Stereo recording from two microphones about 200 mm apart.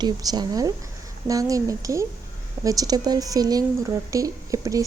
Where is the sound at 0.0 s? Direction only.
20° right (ahead or behind).